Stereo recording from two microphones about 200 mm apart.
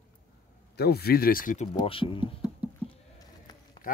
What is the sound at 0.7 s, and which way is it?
Speech, 50° left (ahead or behind).